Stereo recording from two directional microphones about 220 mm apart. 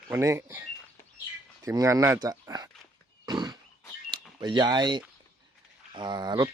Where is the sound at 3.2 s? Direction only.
15° right (ahead or behind).